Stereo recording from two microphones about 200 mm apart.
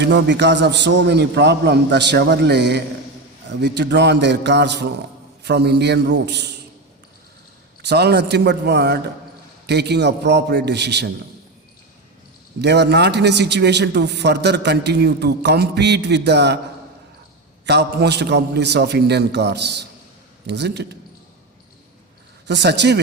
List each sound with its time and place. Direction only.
0.0 s a man's voice: 60° right (ahead or behind)
7.8 s a man's voice: 55° right (ahead or behind)
12.6 s a man's voice: 55° right (ahead or behind)
17.7 s a man's voice: 55° right (ahead or behind)
22.4 s a man's voice: 60° right (ahead or behind)